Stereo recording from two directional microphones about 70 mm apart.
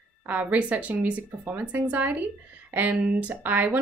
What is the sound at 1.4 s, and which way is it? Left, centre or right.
Speech, right.